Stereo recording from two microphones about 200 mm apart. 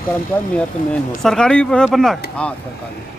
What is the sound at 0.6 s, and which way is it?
A man's voice, 5° left (ahead or behind).